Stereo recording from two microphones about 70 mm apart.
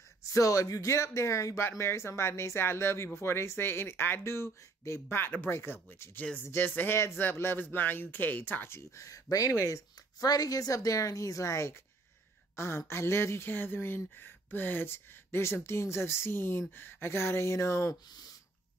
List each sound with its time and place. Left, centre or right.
0.3 s speech: left